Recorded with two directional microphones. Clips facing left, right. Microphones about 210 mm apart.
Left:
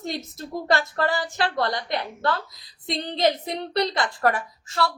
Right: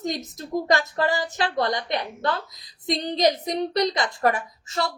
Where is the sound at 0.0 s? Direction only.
15° right (ahead or behind).